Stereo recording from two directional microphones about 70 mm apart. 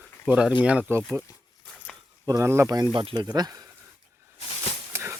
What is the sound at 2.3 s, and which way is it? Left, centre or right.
Speech, right.